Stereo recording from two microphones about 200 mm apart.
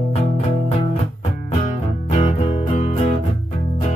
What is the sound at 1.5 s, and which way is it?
Music, 35° left (ahead or behind).